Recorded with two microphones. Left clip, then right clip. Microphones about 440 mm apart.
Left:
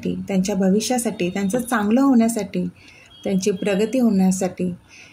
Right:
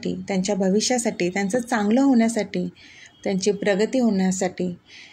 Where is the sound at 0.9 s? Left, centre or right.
Left.